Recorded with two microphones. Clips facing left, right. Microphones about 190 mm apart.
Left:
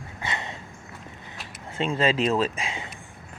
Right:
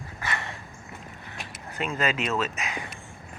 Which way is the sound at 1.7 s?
30° left (ahead or behind).